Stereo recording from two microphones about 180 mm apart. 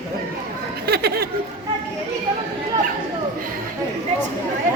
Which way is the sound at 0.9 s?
60° right (ahead or behind).